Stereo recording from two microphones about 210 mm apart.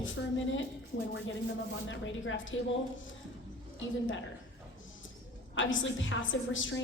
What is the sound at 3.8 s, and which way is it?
Speech, 65° left (ahead or behind).